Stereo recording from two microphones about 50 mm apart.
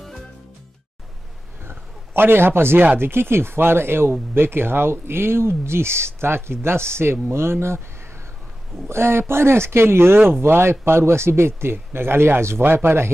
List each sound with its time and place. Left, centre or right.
1.7 s a sound: right
3.0 s speech: right
8.8 s speech: right